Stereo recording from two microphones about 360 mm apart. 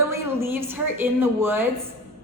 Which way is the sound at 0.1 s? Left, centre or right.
Centre.